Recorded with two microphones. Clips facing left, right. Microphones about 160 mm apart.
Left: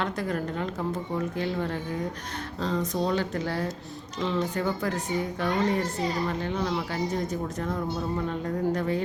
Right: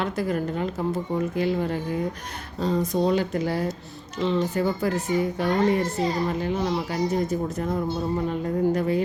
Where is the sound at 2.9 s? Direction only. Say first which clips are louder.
Right 4 dB; 15° right (ahead or behind).